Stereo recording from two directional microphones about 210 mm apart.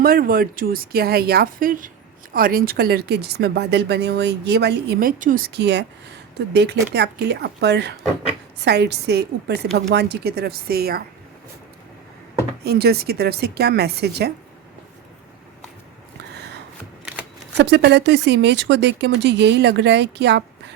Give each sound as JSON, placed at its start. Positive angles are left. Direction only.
{"t": 0.0, "sound": "speech", "side_deg": -45}
{"t": 12.6, "sound": "speech", "side_deg": -50}
{"t": 17.6, "sound": "speech", "side_deg": -55}